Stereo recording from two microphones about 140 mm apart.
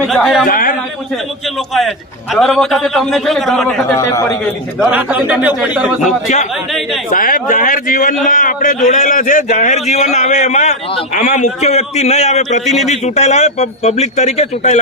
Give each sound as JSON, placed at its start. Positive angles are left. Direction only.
{"t": 0.0, "sound": "a man's voice", "side_deg": 5}
{"t": 0.4, "sound": "a sound", "side_deg": 80}
{"t": 1.5, "sound": "a man's voice", "side_deg": 0}
{"t": 3.8, "sound": "a man's voice", "side_deg": 20}
{"t": 4.9, "sound": "speech", "side_deg": -10}
{"t": 6.1, "sound": "a man's voice", "side_deg": 60}
{"t": 6.7, "sound": "speech", "side_deg": 0}
{"t": 7.1, "sound": "a man's voice", "side_deg": 75}